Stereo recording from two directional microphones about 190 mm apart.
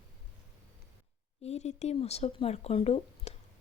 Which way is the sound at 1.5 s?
35° left (ahead or behind).